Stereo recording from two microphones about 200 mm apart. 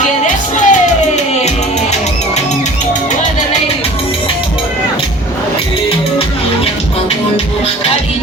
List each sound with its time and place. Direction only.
0.5 s music: 35° left (ahead or behind)